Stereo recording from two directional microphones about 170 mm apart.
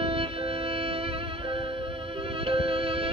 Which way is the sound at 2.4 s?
30° right (ahead or behind).